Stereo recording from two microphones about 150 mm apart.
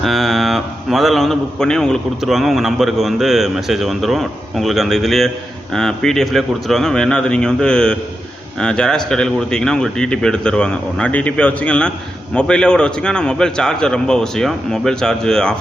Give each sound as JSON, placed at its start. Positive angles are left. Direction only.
{"t": 0.0, "sound": "speech", "side_deg": 0}